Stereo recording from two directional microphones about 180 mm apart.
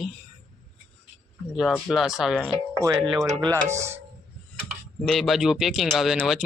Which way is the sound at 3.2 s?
20° right (ahead or behind).